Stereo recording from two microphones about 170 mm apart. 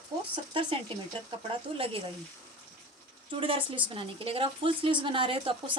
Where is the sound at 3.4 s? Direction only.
30° right (ahead or behind).